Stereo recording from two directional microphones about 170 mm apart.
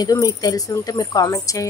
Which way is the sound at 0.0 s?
20° left (ahead or behind).